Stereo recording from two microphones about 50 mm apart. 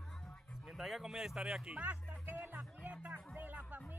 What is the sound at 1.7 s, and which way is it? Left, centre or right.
Speech, right.